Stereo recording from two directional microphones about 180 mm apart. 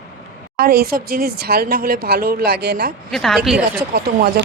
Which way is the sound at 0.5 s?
60° right (ahead or behind).